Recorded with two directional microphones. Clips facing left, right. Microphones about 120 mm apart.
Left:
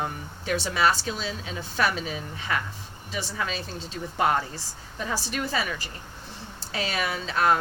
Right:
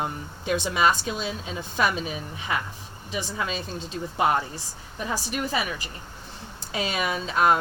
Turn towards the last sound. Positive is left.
turn(degrees=-20)  # may be behind; listen again after turning